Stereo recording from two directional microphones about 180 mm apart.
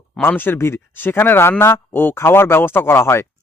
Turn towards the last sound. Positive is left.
turn(degrees=15)  # may be behind; listen again after turning